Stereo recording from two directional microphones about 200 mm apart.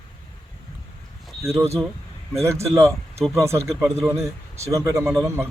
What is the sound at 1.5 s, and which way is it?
Speech, 15° right (ahead or behind).